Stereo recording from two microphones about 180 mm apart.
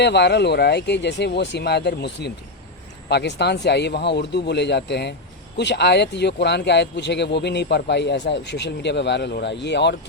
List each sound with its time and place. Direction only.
0.0 s speech: 70° left (ahead or behind)